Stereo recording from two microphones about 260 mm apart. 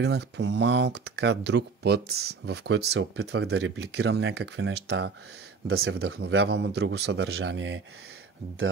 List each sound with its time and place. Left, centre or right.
0.0 s speech: right
5.7 s speech: right